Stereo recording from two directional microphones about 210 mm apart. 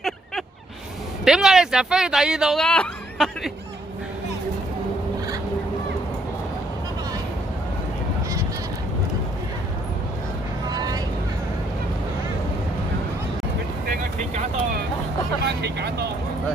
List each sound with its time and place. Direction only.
1.2 s speech: centre (ahead or behind)
10.7 s vehicle: 20° right (ahead or behind)
13.8 s vehicle: 45° right (ahead or behind)